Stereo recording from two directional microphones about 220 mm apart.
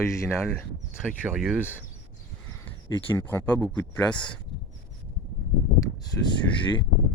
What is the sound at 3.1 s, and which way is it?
Speech, 10° left (ahead or behind).